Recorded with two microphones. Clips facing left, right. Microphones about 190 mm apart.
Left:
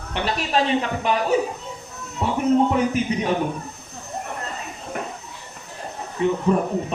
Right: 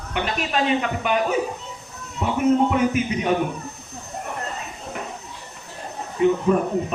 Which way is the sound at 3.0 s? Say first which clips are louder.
Even; 35° left (ahead or behind).